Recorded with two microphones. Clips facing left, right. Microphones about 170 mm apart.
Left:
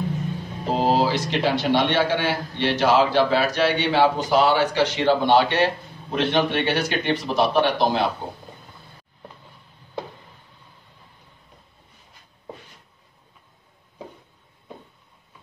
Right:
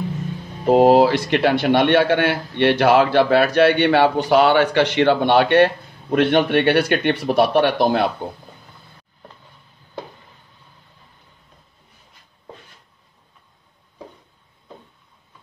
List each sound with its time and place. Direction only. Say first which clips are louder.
0.7 s a man's voice: right 8 dB; 60° right (ahead or behind)